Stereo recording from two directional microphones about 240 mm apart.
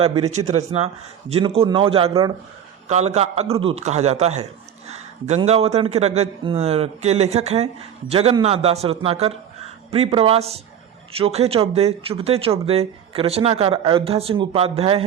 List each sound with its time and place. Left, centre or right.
0.0 s a man's voice: right